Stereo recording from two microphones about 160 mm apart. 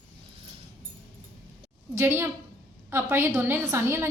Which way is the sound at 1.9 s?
15° right (ahead or behind).